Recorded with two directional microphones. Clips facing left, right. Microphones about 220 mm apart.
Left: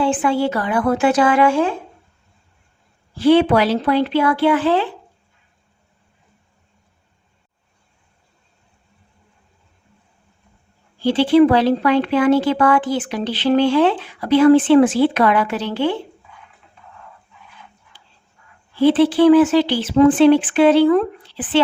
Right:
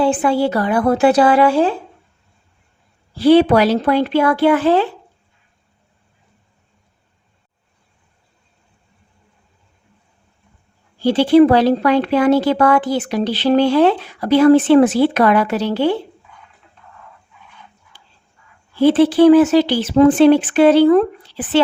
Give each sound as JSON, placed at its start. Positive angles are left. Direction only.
{"t": 0.0, "sound": "speech", "side_deg": -40}
{"t": 3.2, "sound": "speech", "side_deg": -35}
{"t": 11.0, "sound": "speech", "side_deg": -40}
{"t": 17.9, "sound": "dog", "side_deg": -45}
{"t": 18.8, "sound": "speech", "side_deg": -45}